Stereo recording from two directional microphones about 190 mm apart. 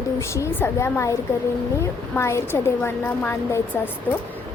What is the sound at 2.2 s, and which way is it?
A woman's voice, 15° left (ahead or behind).